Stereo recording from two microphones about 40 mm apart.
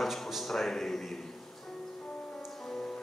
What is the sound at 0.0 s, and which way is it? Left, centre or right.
Speech, centre.